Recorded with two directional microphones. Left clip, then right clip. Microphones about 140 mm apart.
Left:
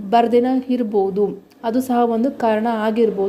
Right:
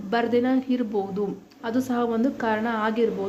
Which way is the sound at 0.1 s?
35° left (ahead or behind).